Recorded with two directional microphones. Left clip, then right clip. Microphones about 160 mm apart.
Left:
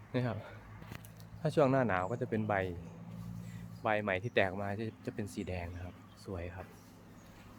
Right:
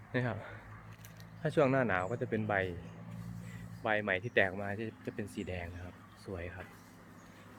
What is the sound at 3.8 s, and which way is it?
Speech, 10° left (ahead or behind).